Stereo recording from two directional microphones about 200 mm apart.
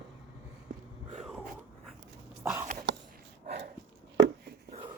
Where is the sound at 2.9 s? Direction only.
60° right (ahead or behind).